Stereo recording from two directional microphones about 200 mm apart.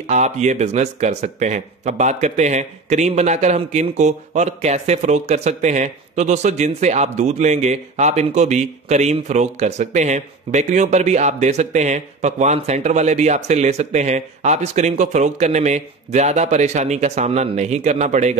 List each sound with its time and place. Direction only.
0.0 s speech: 35° right (ahead or behind)